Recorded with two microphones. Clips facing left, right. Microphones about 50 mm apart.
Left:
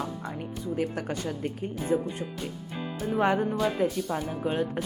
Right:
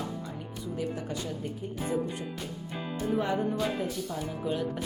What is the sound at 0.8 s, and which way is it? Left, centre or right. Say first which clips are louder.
Speech: left 3 dB; left.